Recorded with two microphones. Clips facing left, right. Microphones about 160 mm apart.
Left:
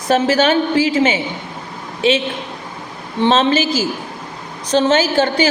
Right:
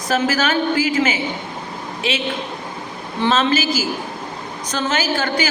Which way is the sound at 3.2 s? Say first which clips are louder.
Left 4 dB; 30° left (ahead or behind).